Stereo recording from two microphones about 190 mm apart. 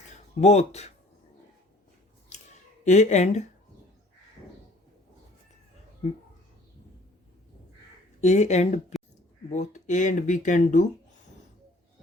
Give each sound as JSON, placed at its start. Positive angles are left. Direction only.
{"t": 0.3, "sound": "speech", "side_deg": 35}
{"t": 2.3, "sound": "a sound", "side_deg": 40}
{"t": 8.2, "sound": "speech", "side_deg": 35}